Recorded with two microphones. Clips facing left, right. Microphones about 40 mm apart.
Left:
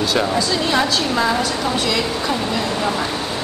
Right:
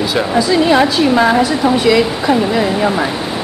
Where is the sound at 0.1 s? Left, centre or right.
Centre.